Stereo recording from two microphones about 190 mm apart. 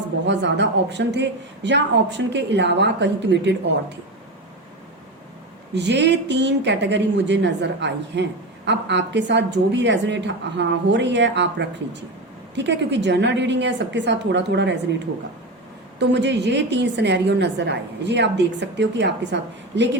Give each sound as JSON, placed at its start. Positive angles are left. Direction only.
{"t": 0.3, "sound": "a woman's voice", "side_deg": -65}
{"t": 5.7, "sound": "a woman's voice", "side_deg": -65}